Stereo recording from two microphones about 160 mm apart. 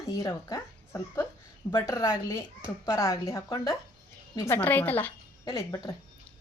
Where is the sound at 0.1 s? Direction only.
20° left (ahead or behind).